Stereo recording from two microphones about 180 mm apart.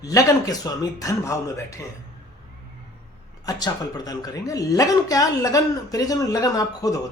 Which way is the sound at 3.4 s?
20° left (ahead or behind).